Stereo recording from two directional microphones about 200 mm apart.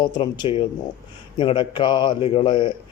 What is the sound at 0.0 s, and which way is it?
A man's voice, 25° left (ahead or behind).